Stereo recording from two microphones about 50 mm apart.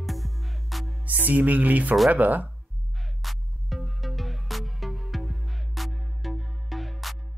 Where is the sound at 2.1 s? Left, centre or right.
Right.